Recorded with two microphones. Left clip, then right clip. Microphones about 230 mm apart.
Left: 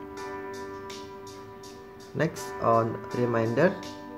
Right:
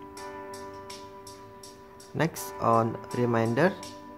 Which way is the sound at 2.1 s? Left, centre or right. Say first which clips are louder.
Left 1 dB; centre.